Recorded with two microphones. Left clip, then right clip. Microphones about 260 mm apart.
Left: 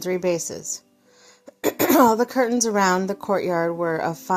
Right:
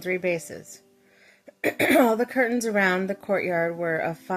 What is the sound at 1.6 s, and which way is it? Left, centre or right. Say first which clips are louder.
A woman's voice: left 3 dB; centre.